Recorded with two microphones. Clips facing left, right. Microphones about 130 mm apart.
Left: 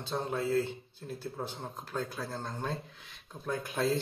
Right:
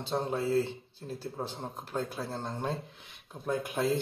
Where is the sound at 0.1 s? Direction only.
30° right (ahead or behind).